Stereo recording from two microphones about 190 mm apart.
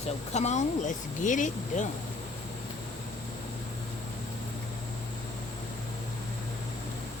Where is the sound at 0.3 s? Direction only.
35° left (ahead or behind).